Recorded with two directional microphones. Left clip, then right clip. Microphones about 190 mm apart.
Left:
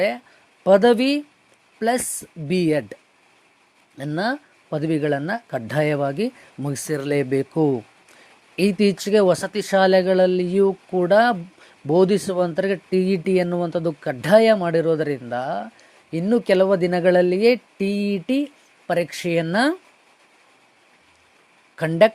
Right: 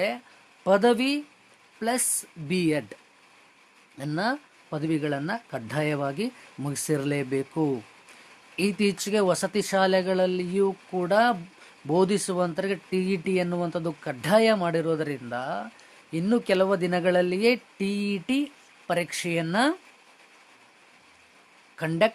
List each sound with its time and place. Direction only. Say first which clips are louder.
0.6 s speech: left 6 dB; 20° left (ahead or behind)
21.8 s speech: left 8 dB; 25° left (ahead or behind)